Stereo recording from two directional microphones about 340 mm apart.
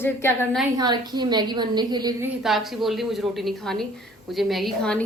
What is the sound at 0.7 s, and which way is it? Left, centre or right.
A woman's voice, centre.